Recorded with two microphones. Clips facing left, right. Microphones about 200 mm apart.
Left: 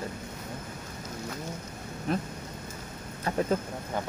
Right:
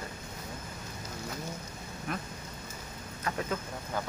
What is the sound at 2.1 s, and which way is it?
Speech, 30° left (ahead or behind).